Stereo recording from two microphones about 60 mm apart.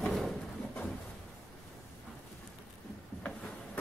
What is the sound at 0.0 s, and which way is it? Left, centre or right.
Pigeon, centre.